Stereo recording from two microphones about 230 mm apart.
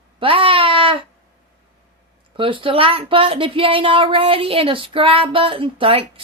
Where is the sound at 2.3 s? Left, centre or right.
Right.